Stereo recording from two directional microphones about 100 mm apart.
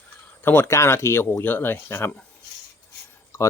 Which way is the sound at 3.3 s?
25° left (ahead or behind).